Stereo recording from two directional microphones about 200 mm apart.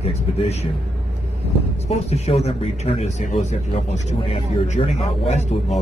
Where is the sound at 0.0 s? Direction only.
30° left (ahead or behind).